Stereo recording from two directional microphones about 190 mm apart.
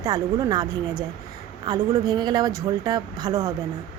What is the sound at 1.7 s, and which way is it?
Speech, 20° right (ahead or behind).